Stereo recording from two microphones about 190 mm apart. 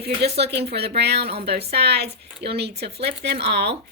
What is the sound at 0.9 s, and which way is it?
Speech, 60° right (ahead or behind).